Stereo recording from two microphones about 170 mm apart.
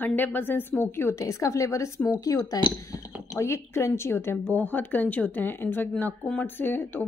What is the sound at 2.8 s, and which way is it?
Chink, 20° left (ahead or behind).